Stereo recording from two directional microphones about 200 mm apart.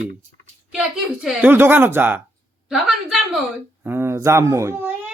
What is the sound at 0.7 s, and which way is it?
A woman's voice, 5° right (ahead or behind).